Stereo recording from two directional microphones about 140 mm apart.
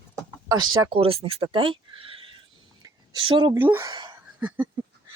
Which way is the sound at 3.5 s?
15° right (ahead or behind).